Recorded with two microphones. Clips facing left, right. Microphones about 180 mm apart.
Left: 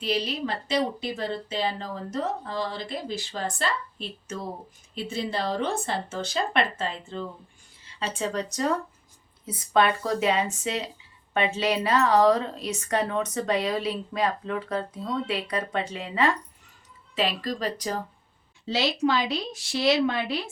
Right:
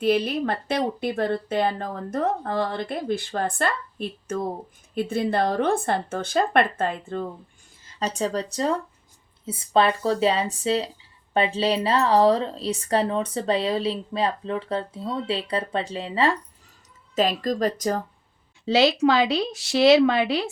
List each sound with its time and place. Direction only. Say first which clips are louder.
0.0 s speech: right 6 dB; 55° right (ahead or behind)
7.9 s a woman's voice: right 3 dB; 40° right (ahead or behind)
17.2 s speech: right 5 dB; 45° right (ahead or behind)
18.6 s a woman's voice: right 6 dB; 85° right